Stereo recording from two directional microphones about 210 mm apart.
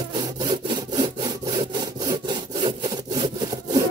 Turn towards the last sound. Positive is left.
turn(degrees=-20)  # may be behind; listen again after turning